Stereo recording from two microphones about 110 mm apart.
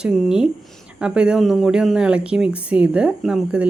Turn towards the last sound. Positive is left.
turn(degrees=-10)  # may be behind; listen again after turning